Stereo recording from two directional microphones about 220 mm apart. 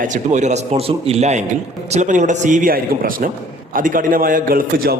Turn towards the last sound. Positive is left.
turn(degrees=-40)  # may be behind; listen again after turning